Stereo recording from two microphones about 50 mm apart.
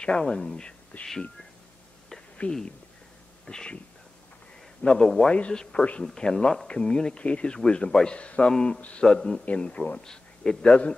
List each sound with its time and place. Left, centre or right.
0.0 s speech: centre
2.4 s a man's voice: left
3.4 s speech: centre
4.9 s speech: centre
5.3 s a man's voice: left
8.5 s a man's voice: centre